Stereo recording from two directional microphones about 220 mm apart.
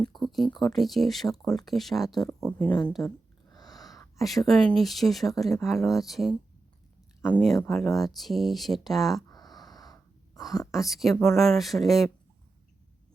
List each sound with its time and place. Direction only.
0.0 s speech: centre (ahead or behind)
3.5 s a sound: 15° left (ahead or behind)
4.4 s speech: centre (ahead or behind)
9.3 s wheeze: 20° left (ahead or behind)
10.7 s speech: centre (ahead or behind)